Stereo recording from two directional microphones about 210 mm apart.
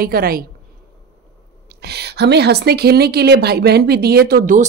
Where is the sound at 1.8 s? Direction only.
50° right (ahead or behind).